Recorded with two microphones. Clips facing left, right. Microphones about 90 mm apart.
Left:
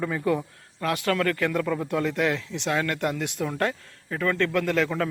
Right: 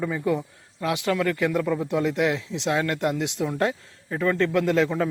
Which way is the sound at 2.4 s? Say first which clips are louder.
Right 2 dB; 25° right (ahead or behind).